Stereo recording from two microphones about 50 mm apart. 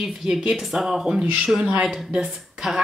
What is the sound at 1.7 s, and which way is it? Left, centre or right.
Speech, right.